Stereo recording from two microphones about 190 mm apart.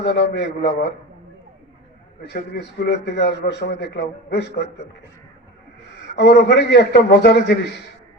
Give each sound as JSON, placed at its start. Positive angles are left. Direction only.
{"t": 0.0, "sound": "a man's voice", "side_deg": 65}
{"t": 2.3, "sound": "a man's voice", "side_deg": 60}
{"t": 6.1, "sound": "a man's voice", "side_deg": 60}